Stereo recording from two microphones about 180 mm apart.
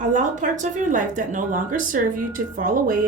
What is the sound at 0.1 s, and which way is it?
Speech, 45° right (ahead or behind).